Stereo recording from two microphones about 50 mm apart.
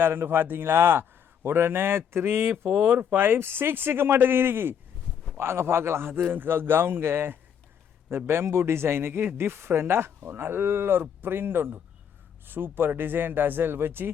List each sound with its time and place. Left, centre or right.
0.0 s a man's voice: right
6.3 s a man's voice: right